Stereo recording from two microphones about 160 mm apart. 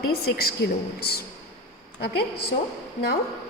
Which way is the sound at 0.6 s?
90° left.